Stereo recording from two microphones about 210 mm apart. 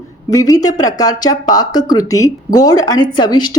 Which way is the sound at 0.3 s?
15° left (ahead or behind).